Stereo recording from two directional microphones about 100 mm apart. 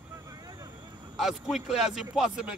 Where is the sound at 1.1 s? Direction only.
Centre (ahead or behind).